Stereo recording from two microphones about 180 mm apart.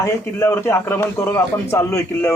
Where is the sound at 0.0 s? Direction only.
15° left (ahead or behind).